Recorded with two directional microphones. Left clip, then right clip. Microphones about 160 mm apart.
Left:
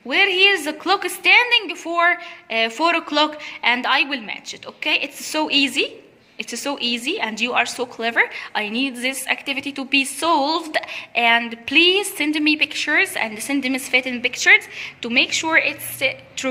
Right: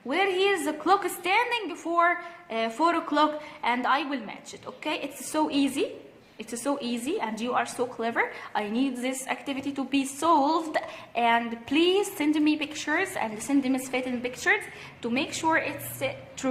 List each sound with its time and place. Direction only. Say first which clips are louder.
0.1 s a woman's voice: left 9 dB; 20° left (ahead or behind)